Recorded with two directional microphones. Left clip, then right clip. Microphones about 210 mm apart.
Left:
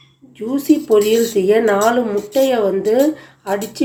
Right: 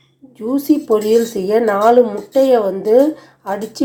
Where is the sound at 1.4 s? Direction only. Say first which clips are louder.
Left 1 dB; 15° right (ahead or behind).